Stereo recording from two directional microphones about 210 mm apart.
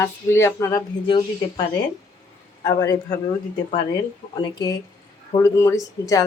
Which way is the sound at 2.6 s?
20° left (ahead or behind).